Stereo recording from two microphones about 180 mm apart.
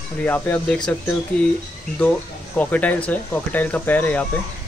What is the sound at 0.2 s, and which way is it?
Speech, 10° left (ahead or behind).